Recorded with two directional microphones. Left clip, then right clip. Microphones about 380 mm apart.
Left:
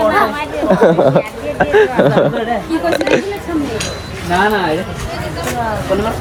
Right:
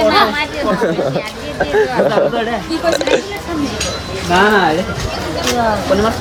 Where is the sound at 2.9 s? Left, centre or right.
Centre.